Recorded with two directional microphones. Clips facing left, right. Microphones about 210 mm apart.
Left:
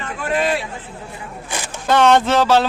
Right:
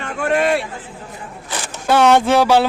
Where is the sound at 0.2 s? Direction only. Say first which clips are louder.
Right 3 dB; 65° right (ahead or behind).